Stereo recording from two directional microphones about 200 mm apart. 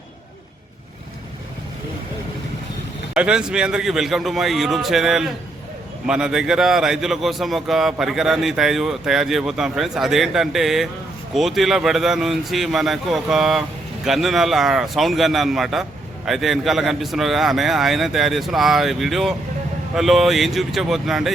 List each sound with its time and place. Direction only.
3.2 s speech: 5° right (ahead or behind)